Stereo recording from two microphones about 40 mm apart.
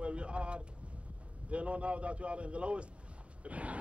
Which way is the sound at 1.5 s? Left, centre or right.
Right.